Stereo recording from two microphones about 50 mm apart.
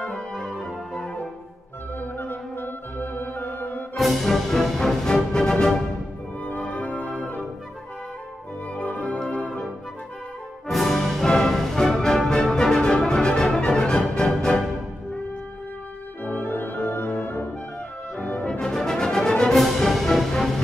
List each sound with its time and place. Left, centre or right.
0.1 s music: centre
2.0 s music: left
3.9 s music: centre
6.4 s music: left
8.7 s music: left
10.7 s brass instrument: centre
11.3 s music: centre
16.3 s music: left
18.1 s brass instrument: left
18.5 s music: centre
19.5 s music: centre